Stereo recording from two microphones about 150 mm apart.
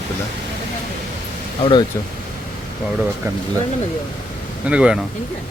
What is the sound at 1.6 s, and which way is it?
Speech, 35° left (ahead or behind).